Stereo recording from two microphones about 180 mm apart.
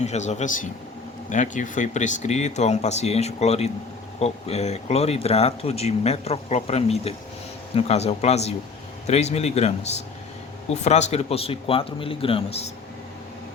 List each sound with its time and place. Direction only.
0.0 s speech: 40° left (ahead or behind)